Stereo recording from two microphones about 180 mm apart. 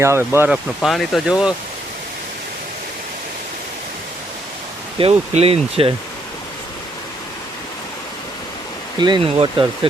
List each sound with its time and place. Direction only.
0.0 s speech: 15° right (ahead or behind)
4.9 s speech: 35° right (ahead or behind)
9.0 s speech: 25° right (ahead or behind)